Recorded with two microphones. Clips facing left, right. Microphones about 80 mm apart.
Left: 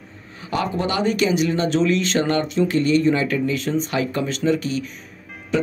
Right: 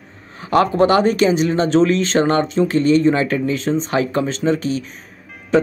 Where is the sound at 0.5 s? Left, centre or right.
Right.